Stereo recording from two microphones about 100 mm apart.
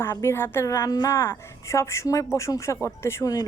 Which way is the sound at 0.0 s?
25° left (ahead or behind).